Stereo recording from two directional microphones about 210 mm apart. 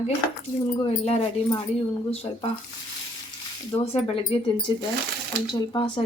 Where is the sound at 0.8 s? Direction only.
30° left (ahead or behind).